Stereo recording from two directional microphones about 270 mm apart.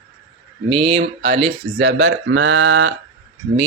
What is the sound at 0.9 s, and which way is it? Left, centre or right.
Speech, right.